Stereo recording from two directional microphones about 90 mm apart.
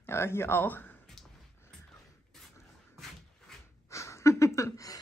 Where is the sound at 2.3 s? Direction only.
5° left (ahead or behind).